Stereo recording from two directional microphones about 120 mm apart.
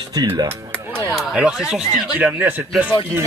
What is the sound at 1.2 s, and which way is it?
Speech, 5° right (ahead or behind).